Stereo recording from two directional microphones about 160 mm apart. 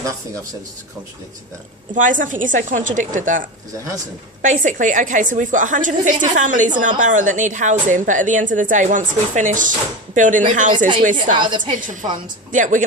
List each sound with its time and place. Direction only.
2.0 s a woman's voice: 55° right (ahead or behind)
4.4 s a woman's voice: 55° right (ahead or behind)
11.3 s a woman's voice: 30° right (ahead or behind)
12.5 s a woman's voice: 55° right (ahead or behind)